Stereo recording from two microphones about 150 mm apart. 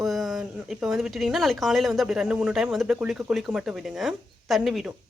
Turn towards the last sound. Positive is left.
turn(degrees=0)  # may be behind; listen again after turning